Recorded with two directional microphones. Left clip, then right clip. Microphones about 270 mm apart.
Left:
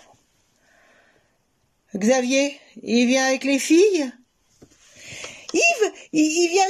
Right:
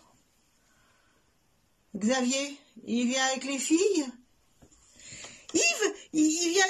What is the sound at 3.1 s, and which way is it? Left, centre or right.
Speech, centre.